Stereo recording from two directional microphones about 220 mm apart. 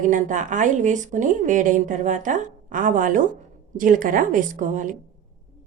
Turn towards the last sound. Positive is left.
turn(degrees=-35)  # may be behind; listen again after turning